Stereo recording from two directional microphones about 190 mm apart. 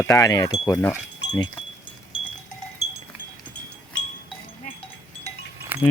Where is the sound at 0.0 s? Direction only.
15° left (ahead or behind).